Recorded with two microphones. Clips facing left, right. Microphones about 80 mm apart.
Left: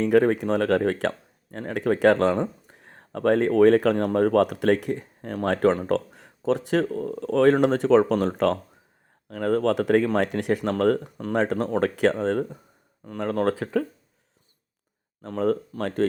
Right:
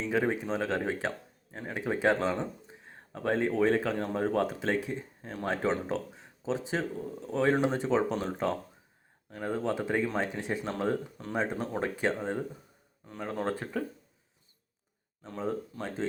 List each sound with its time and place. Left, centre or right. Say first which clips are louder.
0.0 s speech: left 10 dB; left
15.2 s speech: left 10 dB; left